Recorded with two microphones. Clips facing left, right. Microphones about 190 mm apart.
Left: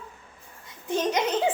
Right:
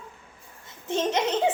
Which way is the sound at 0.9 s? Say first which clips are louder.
Even; 25° right (ahead or behind).